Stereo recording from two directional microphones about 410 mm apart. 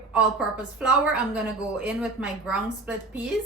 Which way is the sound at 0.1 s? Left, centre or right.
Centre.